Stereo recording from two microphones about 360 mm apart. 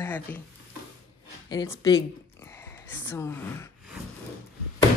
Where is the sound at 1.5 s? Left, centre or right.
Centre.